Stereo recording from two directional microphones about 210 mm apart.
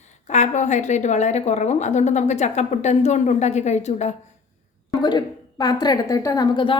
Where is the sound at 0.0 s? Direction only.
35° left (ahead or behind).